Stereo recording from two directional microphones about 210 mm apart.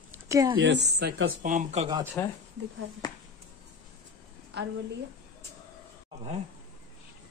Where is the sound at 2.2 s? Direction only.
10° left (ahead or behind).